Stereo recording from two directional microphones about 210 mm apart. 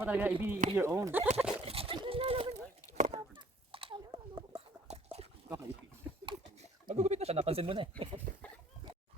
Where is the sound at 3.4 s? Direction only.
25° right (ahead or behind).